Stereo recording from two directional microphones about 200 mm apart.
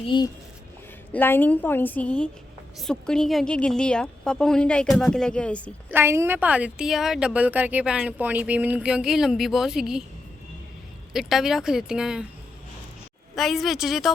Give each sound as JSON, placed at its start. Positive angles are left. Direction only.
{"t": 0.0, "sound": "speech", "side_deg": 25}
{"t": 1.1, "sound": "a woman's voice", "side_deg": 10}
{"t": 5.9, "sound": "speech", "side_deg": -10}
{"t": 11.1, "sound": "speech", "side_deg": 0}
{"t": 13.3, "sound": "speech", "side_deg": 0}